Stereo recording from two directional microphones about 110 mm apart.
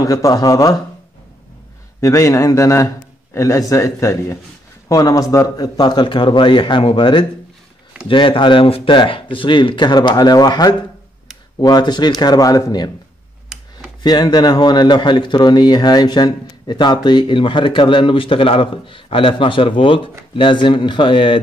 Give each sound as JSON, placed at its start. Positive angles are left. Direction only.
{"t": 0.0, "sound": "speech", "side_deg": 30}
{"t": 2.0, "sound": "a man's voice", "side_deg": 30}
{"t": 14.0, "sound": "a man's voice", "side_deg": 40}